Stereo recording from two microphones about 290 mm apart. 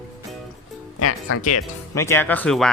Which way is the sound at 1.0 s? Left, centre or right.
Left.